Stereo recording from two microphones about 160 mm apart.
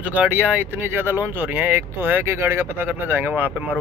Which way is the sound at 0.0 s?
10° right (ahead or behind).